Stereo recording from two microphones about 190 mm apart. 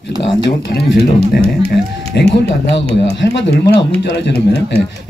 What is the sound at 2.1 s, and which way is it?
Speech, 60° left (ahead or behind).